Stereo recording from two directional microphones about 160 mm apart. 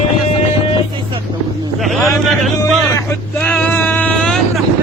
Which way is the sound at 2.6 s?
15° left (ahead or behind).